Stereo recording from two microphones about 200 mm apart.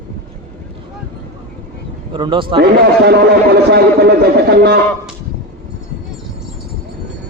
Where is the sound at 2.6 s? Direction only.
55° right (ahead or behind).